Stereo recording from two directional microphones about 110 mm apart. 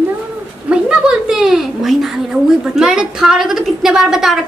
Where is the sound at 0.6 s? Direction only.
10° right (ahead or behind).